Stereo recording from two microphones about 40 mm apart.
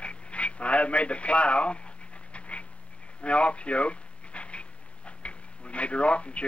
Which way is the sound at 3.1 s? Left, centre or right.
Left.